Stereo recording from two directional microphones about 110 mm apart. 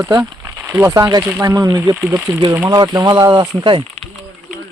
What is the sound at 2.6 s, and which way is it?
Speech, 40° right (ahead or behind).